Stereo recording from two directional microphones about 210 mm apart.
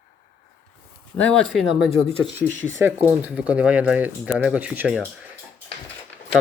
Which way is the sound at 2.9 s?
10° right (ahead or behind).